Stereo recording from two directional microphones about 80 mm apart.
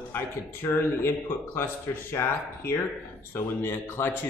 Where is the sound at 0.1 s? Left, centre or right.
Left.